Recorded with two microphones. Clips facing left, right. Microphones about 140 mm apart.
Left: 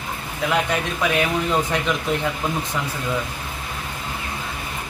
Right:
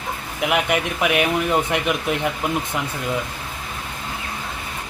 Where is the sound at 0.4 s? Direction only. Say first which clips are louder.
Right 1 dB; 15° right (ahead or behind).